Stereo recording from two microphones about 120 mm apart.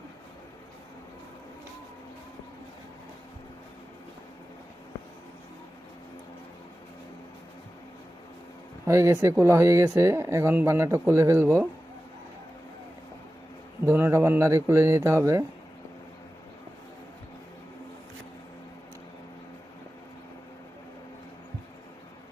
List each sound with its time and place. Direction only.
8.9 s speech: 25° right (ahead or behind)
13.8 s speech: 20° right (ahead or behind)